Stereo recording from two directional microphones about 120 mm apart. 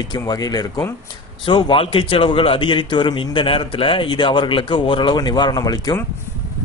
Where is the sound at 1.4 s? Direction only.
50° left (ahead or behind); by 6.0 s 30° left (ahead or behind).